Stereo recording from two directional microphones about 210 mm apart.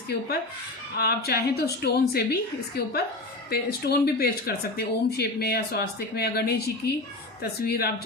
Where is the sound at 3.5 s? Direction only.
50° left (ahead or behind).